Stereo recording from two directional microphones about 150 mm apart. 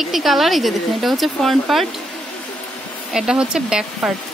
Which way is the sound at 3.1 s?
5° right (ahead or behind).